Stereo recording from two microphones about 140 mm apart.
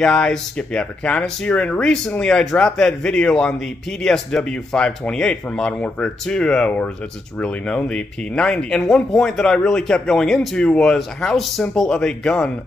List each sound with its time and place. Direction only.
0.0 s speech: 5° left (ahead or behind)